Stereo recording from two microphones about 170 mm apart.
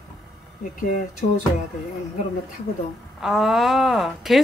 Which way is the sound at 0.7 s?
50° left (ahead or behind).